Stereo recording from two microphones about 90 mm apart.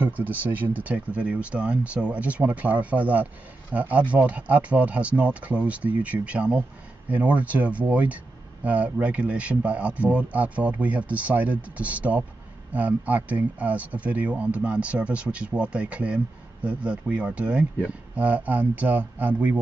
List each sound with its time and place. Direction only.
0.0 s speech: 20° right (ahead or behind)